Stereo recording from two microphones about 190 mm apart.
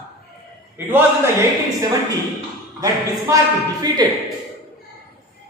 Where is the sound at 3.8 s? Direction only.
20° right (ahead or behind).